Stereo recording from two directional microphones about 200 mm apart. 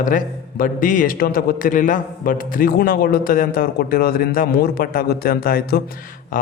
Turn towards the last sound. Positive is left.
turn(degrees=40)  # may be behind; listen again after turning